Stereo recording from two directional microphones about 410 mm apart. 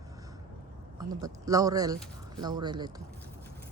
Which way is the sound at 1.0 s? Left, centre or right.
Centre.